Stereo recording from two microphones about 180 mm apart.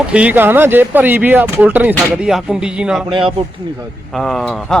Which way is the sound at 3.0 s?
25° right (ahead or behind).